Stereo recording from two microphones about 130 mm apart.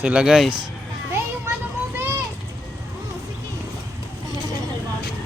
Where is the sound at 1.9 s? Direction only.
20° right (ahead or behind).